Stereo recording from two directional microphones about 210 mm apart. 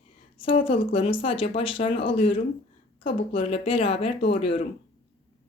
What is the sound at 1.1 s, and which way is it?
Speech, 25° left (ahead or behind).